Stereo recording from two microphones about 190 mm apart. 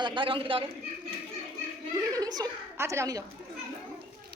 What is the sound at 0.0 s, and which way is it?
Speech, 25° right (ahead or behind).